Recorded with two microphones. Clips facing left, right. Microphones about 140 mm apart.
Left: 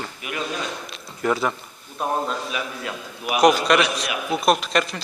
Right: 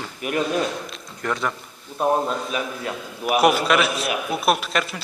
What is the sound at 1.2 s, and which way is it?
Speech, 5° left (ahead or behind).